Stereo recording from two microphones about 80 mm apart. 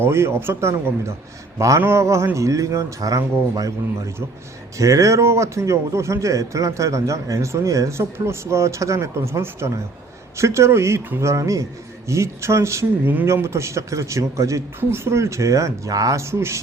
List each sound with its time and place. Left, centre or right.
0.0 s a man's voice: right